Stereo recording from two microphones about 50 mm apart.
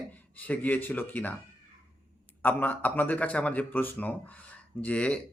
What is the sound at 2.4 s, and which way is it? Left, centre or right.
Speech, left.